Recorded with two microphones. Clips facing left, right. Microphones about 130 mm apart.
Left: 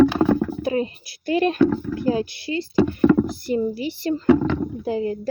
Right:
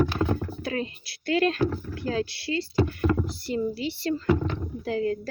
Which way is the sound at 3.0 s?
55° left (ahead or behind).